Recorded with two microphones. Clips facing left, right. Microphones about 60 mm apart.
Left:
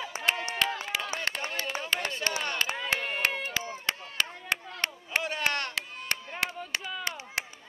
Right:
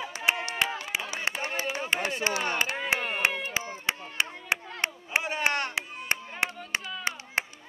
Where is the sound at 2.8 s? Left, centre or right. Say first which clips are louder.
Right 2 dB; right.